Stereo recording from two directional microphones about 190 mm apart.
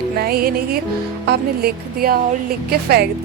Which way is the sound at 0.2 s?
55° right (ahead or behind).